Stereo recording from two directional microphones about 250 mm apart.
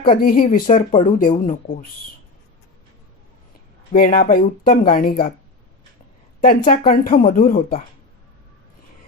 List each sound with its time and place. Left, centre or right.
0.2 s speech: left
3.9 s speech: left
6.4 s speech: left